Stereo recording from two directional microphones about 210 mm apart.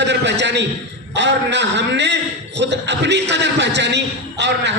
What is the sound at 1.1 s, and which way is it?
A man's voice, 55° right (ahead or behind).